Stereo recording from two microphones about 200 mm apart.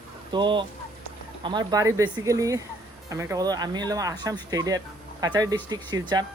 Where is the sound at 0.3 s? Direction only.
25° right (ahead or behind).